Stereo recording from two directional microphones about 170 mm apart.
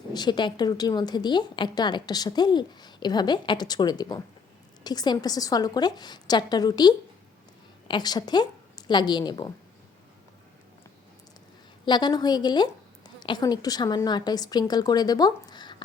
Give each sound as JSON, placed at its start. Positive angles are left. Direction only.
{"t": 0.1, "sound": "a woman's voice", "side_deg": 25}
{"t": 11.9, "sound": "speech", "side_deg": 25}